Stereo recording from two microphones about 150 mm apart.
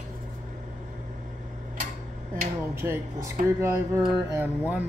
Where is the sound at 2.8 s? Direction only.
20° right (ahead or behind).